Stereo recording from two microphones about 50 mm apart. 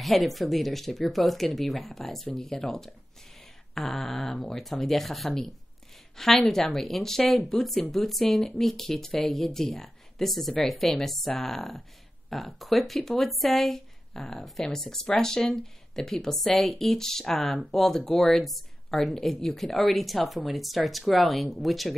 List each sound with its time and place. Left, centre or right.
0.0 s speech: centre